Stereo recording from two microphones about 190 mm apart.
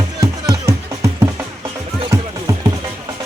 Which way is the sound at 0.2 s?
15° right (ahead or behind).